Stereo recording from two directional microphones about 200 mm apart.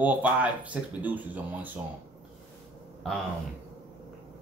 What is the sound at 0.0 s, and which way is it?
Speech, 10° right (ahead or behind).